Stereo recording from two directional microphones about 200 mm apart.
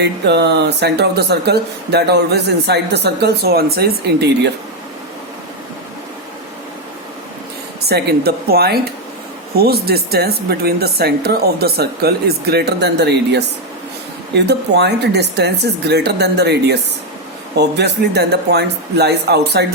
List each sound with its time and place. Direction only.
0.0 s speech: 55° right (ahead or behind)
7.9 s speech: 50° right (ahead or behind)